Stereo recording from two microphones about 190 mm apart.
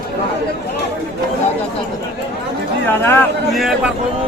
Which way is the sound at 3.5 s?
Centre (ahead or behind).